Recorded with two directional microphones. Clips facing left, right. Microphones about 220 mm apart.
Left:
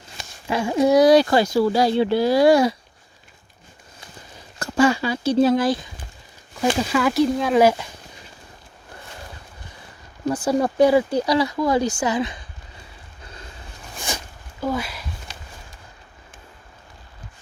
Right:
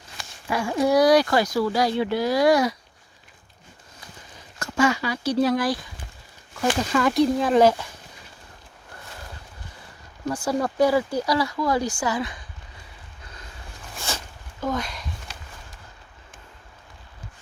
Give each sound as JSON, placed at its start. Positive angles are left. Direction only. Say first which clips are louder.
{"t": 0.2, "sound": "speech", "louder": "left 3 dB", "side_deg": 25}
{"t": 4.6, "sound": "speech", "louder": "left 4 dB", "side_deg": 35}
{"t": 6.7, "sound": "speech", "louder": "even", "side_deg": 5}
{"t": 10.2, "sound": "speech", "louder": "left 4 dB", "side_deg": 20}
{"t": 13.9, "sound": "a sound", "louder": "left 2 dB", "side_deg": 15}
{"t": 14.6, "sound": "speech", "louder": "left 2 dB", "side_deg": 10}